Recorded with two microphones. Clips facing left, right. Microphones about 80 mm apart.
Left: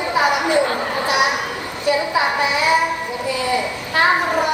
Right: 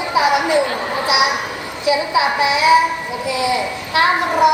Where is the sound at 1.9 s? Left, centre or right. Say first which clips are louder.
Right 2 dB; centre.